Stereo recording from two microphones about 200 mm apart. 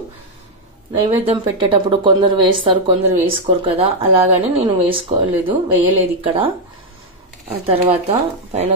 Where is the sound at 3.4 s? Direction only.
30° right (ahead or behind).